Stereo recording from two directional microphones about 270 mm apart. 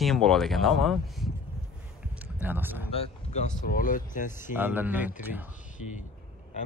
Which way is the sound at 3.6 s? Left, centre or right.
Left.